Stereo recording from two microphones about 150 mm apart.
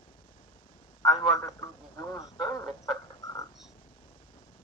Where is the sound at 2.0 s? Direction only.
20° left (ahead or behind).